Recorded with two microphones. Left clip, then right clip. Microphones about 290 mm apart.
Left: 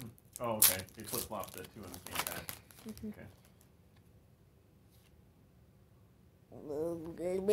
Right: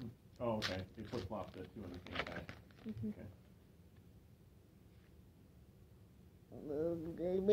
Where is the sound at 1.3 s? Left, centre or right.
Left.